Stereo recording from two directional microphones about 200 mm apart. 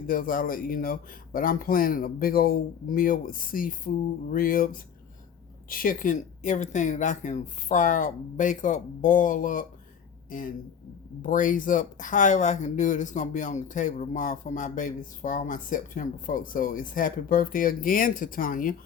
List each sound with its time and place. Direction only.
0.1 s speech: 45° left (ahead or behind)